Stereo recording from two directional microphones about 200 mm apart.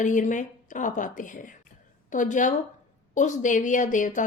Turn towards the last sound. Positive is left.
turn(degrees=40)  # may be behind; listen again after turning